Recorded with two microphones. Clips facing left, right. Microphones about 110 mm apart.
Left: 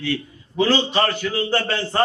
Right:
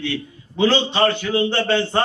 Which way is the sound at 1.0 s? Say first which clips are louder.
Right 3 dB; 30° right (ahead or behind).